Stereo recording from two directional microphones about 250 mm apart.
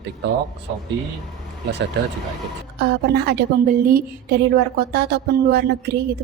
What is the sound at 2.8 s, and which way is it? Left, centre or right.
A woman's voice, right.